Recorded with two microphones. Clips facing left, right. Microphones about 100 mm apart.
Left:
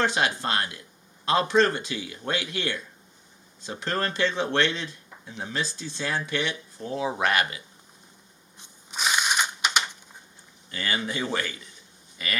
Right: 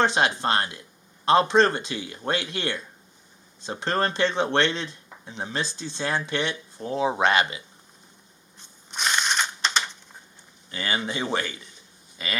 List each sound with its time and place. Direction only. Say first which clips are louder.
0.0 s speech: right 3 dB; 25° right (ahead or behind)
8.9 s crushing: even; 5° left (ahead or behind)
10.7 s speech: right 1 dB; 25° right (ahead or behind)